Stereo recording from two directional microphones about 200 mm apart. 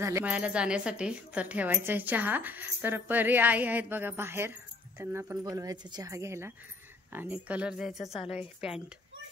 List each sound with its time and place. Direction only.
0.0 s a woman's voice: 10° right (ahead or behind)